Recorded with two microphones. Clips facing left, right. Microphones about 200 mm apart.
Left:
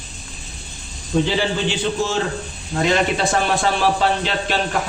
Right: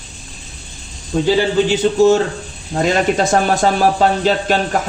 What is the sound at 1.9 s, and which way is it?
A man's voice, 40° right (ahead or behind).